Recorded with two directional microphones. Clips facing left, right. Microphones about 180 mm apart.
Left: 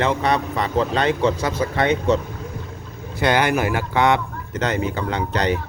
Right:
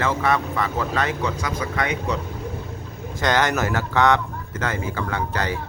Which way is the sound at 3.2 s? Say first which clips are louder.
Left 2 dB; 10° left (ahead or behind).